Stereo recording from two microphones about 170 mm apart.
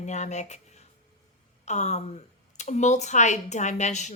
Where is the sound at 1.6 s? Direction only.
40° left (ahead or behind).